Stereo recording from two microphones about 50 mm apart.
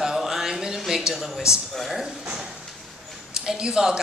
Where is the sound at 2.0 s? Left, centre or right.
Centre.